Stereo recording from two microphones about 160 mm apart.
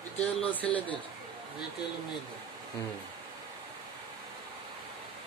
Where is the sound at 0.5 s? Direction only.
10° left (ahead or behind).